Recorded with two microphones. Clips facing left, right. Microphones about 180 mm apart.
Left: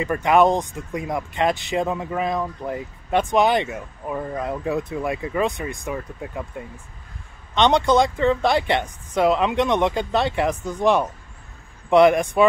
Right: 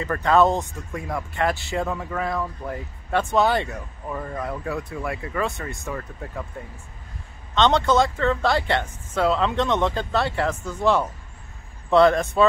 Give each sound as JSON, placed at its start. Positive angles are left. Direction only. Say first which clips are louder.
{"t": 0.0, "sound": "speech", "louder": "left 2 dB", "side_deg": 15}
{"t": 7.5, "sound": "speech", "louder": "left 2 dB", "side_deg": 15}